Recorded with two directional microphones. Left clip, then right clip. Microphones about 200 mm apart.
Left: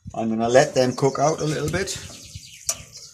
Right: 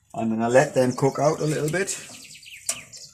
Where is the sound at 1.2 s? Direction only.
Centre (ahead or behind).